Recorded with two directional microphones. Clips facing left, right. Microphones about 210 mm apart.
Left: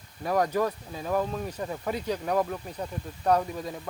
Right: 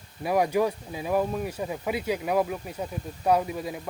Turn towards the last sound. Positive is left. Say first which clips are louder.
# right 1 dB
turn(degrees=-10)  # may be behind; listen again after turning